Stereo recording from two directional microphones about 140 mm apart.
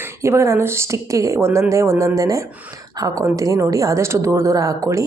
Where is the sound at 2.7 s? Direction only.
25° right (ahead or behind).